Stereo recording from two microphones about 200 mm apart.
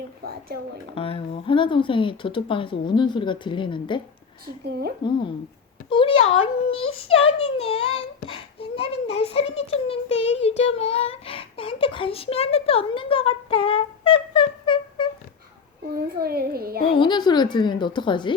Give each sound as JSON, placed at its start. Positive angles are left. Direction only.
{"t": 0.5, "sound": "a child's voice", "side_deg": -50}
{"t": 0.9, "sound": "a child's voice", "side_deg": 25}
{"t": 5.0, "sound": "a child's voice", "side_deg": 25}
{"t": 16.0, "sound": "a child's voice", "side_deg": -50}
{"t": 17.0, "sound": "a child's voice", "side_deg": 20}